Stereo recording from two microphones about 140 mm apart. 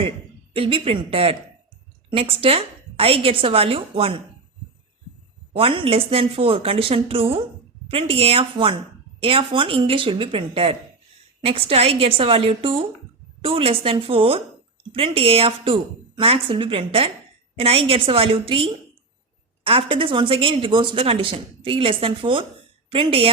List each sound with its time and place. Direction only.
0.5 s speech: 40° right (ahead or behind)
5.5 s a woman's voice: 40° right (ahead or behind)